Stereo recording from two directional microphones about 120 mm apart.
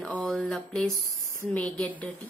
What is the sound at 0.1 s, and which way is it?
A woman's voice, 10° left (ahead or behind).